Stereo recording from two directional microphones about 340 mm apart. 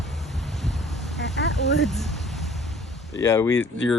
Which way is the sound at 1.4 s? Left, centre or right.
Left.